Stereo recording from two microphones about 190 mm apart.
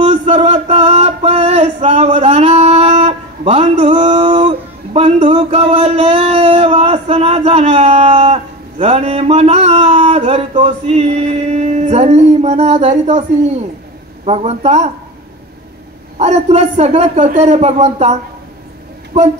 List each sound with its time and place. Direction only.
0.0 s male singing: 35° right (ahead or behind)
14.2 s a man's voice: 35° right (ahead or behind)
16.2 s a man's voice: 35° right (ahead or behind)